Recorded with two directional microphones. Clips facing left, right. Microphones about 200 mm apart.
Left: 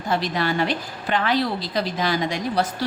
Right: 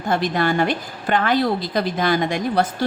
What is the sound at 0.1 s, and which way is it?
A woman's voice, 50° right (ahead or behind).